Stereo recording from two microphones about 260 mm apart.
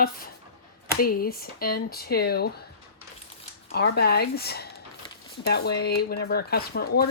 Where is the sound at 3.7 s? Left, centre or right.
Left.